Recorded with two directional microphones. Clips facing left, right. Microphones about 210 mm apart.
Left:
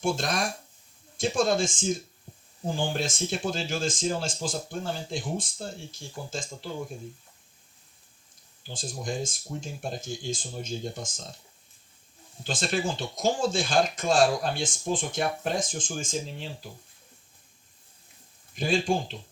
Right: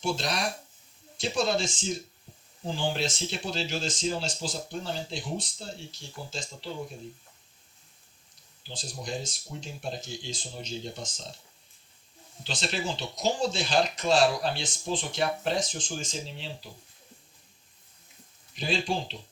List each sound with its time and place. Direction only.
0.0 s speech: 50° left (ahead or behind)
8.6 s speech: 50° left (ahead or behind)
12.4 s speech: 50° left (ahead or behind)
18.5 s speech: 50° left (ahead or behind)